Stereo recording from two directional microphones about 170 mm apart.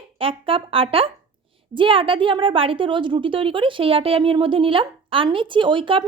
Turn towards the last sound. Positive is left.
turn(degrees=-30)  # may be behind; listen again after turning